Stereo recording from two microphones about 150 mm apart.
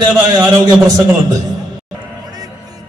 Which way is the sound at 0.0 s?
30° right (ahead or behind).